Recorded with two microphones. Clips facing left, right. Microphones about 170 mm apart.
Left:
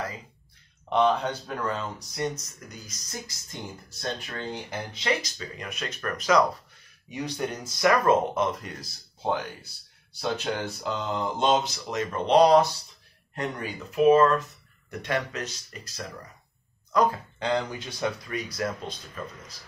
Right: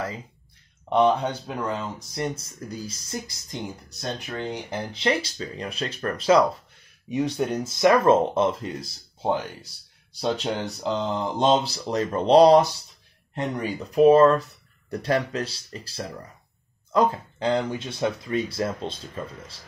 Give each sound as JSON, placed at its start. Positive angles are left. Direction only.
{"t": 0.8, "sound": "speech", "side_deg": -15}
{"t": 2.1, "sound": "speech", "side_deg": -30}
{"t": 4.0, "sound": "speech", "side_deg": -15}
{"t": 4.9, "sound": "speech", "side_deg": -30}
{"t": 10.2, "sound": "speech", "side_deg": -20}
{"t": 11.6, "sound": "speech", "side_deg": -35}